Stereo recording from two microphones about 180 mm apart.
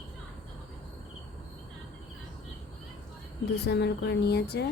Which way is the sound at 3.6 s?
70° left (ahead or behind).